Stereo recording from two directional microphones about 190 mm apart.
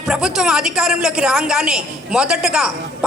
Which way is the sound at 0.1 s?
5° right (ahead or behind).